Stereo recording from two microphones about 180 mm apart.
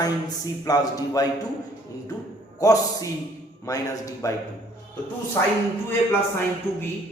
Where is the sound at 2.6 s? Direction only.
20° left (ahead or behind).